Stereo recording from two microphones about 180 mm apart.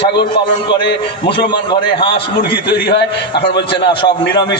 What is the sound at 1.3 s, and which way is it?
Speech, 25° left (ahead or behind).